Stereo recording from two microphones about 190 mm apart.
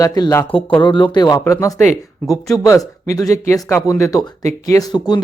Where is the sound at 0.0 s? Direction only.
20° left (ahead or behind).